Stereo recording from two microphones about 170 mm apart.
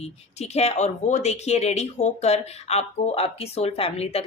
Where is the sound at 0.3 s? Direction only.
40° left (ahead or behind).